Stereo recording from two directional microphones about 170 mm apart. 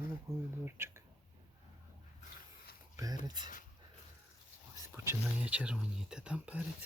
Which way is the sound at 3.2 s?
25° right (ahead or behind).